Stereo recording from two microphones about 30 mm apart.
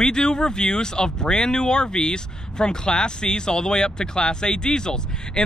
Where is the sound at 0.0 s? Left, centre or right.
Left.